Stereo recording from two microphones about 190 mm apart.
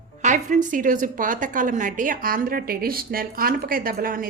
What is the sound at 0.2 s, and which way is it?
A woman's voice, 40° right (ahead or behind).